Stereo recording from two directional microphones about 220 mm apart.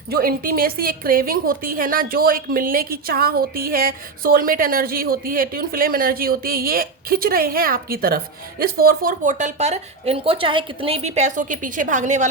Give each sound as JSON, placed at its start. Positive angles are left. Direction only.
{"t": 0.1, "sound": "a woman's voice", "side_deg": -40}